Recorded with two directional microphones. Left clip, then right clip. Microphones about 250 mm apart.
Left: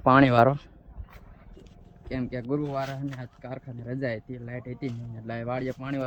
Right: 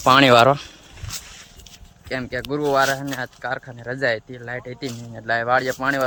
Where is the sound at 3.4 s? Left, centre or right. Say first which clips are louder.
Right 9 dB; right.